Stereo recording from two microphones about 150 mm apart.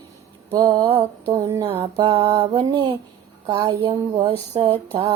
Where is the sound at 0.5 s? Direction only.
30° right (ahead or behind).